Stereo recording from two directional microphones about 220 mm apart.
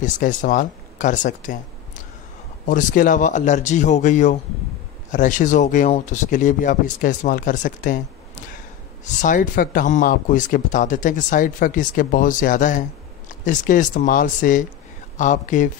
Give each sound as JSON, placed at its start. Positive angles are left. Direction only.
{"t": 0.0, "sound": "speech", "side_deg": 35}
{"t": 2.6, "sound": "speech", "side_deg": 35}
{"t": 9.0, "sound": "speech", "side_deg": 35}